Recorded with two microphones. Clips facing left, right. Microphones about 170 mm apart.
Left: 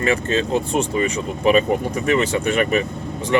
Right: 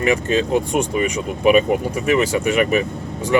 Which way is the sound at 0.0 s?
15° right (ahead or behind).